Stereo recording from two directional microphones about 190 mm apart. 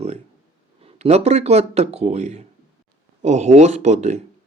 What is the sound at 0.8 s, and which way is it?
Speech, 30° right (ahead or behind).